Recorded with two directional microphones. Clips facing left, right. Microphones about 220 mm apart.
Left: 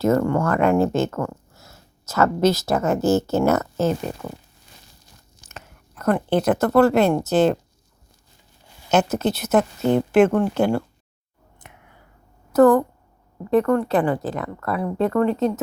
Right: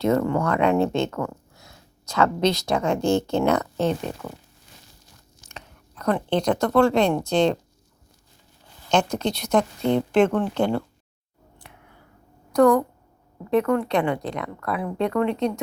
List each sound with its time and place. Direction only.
0.0 s speech: centre (ahead or behind)
5.5 s speech: 5° left (ahead or behind)
8.9 s a woman's voice: 5° left (ahead or behind)
11.6 s finger snapping: 20° left (ahead or behind)
12.5 s a woman's voice: 5° left (ahead or behind)